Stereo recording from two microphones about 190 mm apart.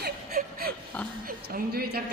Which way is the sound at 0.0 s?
50° right (ahead or behind).